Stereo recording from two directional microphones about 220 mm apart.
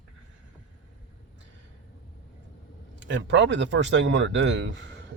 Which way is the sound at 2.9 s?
55° right (ahead or behind).